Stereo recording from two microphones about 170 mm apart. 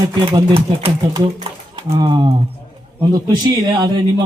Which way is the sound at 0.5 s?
35° right (ahead or behind).